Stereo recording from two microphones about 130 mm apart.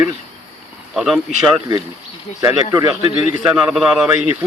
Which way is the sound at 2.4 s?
25° right (ahead or behind).